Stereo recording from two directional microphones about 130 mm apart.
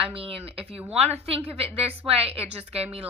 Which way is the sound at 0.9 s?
55° right (ahead or behind).